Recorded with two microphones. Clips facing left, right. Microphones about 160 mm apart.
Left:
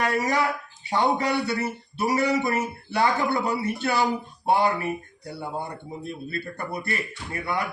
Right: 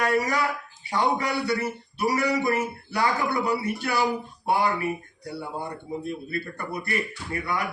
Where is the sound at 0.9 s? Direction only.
25° left (ahead or behind).